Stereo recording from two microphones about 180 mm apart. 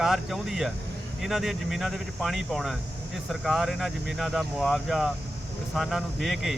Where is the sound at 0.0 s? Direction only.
Centre (ahead or behind).